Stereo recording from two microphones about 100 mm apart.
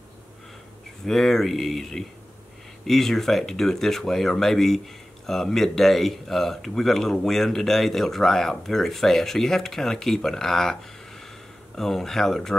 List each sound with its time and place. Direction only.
1.0 s speech: 5° left (ahead or behind)